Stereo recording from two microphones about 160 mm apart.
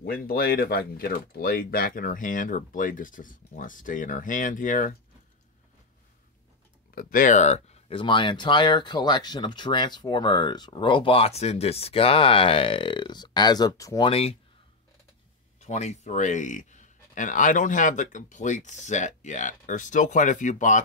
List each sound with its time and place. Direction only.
0.0 s speech: 70° left (ahead or behind)
7.0 s speech: 60° left (ahead or behind); by 14.1 s 20° left (ahead or behind)
15.6 s speech: 45° left (ahead or behind)